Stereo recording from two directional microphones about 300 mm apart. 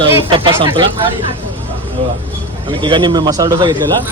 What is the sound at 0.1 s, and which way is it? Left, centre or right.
Speech, centre.